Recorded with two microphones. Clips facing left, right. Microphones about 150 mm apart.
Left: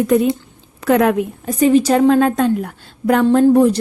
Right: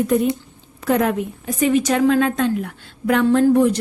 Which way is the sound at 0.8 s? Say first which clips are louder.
Left 5 dB; 75° left (ahead or behind).